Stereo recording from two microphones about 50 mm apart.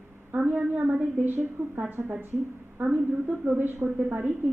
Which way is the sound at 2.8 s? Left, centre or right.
Right.